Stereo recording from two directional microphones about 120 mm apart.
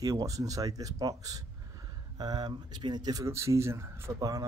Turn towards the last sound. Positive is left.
turn(degrees=-30)  # may be behind; listen again after turning